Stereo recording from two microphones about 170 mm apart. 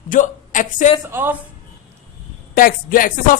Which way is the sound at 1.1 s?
15° right (ahead or behind).